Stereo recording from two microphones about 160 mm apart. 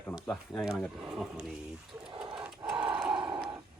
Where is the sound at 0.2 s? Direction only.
Centre (ahead or behind).